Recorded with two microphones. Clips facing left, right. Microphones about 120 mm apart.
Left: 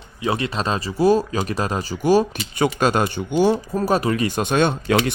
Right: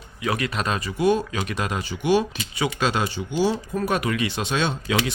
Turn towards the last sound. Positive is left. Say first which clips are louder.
# left 6 dB
turn(degrees=50)  # may be behind; listen again after turning